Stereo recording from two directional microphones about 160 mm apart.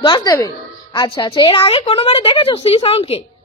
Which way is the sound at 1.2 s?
35° left (ahead or behind).